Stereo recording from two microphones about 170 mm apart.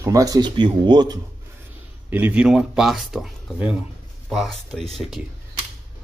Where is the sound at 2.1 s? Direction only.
10° right (ahead or behind).